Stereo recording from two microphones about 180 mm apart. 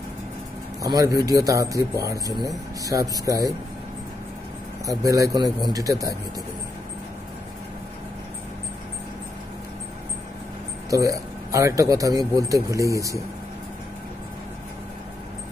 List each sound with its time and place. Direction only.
0.8 s speech: 20° right (ahead or behind)
4.8 s speech: 20° right (ahead or behind)
10.9 s speech: 20° right (ahead or behind)